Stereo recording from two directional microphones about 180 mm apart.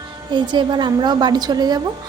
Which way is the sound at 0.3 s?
25° right (ahead or behind).